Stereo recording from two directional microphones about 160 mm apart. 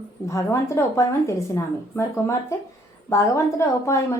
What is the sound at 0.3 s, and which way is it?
Speech, 20° left (ahead or behind).